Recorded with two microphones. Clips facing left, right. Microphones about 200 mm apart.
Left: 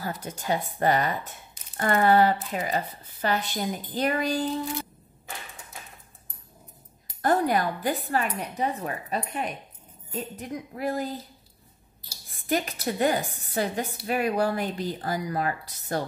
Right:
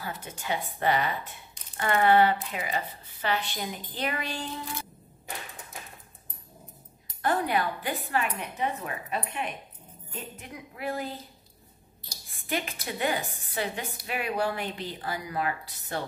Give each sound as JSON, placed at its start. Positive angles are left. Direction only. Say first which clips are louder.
{"t": 0.0, "sound": "speech", "louder": "left 4 dB", "side_deg": 40}
{"t": 7.2, "sound": "speech", "louder": "left 4 dB", "side_deg": 40}
{"t": 12.4, "sound": "speech", "louder": "left 6 dB", "side_deg": 40}